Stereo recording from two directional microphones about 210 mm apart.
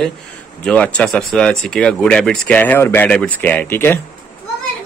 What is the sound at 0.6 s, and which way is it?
Speech, 5° left (ahead or behind).